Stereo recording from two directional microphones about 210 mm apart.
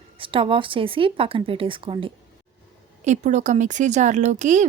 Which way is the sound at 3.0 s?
35° right (ahead or behind).